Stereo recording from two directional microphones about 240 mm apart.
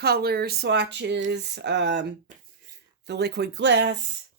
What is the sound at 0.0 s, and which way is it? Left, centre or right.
Speech, right.